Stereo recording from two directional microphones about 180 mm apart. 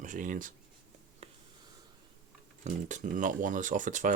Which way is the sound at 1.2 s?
35° right (ahead or behind).